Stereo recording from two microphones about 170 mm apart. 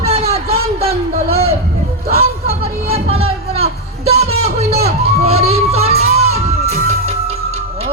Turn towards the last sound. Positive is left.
turn(degrees=-40)  # may be behind; listen again after turning